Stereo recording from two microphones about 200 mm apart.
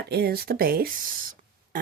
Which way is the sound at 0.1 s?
50° right (ahead or behind).